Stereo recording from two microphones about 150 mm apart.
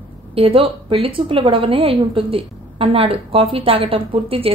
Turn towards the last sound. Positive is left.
turn(degrees=-40)  # may be behind; listen again after turning